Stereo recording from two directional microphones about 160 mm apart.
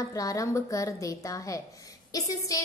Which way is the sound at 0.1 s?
20° left (ahead or behind).